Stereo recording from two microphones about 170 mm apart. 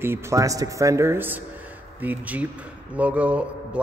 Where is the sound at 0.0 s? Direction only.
15° right (ahead or behind).